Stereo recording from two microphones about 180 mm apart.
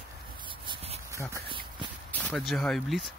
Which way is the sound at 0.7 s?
35° right (ahead or behind).